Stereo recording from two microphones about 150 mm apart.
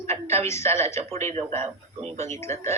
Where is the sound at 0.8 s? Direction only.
20° left (ahead or behind).